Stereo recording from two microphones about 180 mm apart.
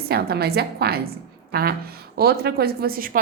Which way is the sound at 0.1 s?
60° right (ahead or behind).